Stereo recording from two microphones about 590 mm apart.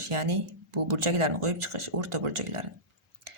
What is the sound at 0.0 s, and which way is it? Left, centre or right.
Speech, right.